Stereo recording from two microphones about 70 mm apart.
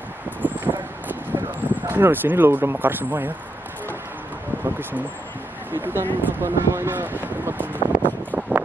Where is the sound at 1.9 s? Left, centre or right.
Right.